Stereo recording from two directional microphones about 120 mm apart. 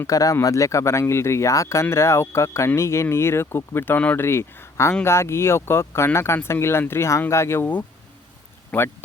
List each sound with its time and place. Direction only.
0.0 s speech: 30° left (ahead or behind)